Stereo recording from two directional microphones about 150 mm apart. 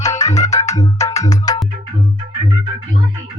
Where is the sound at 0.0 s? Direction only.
20° left (ahead or behind).